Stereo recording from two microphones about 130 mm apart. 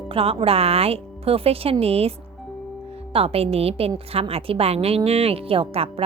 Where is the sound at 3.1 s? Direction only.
50° right (ahead or behind).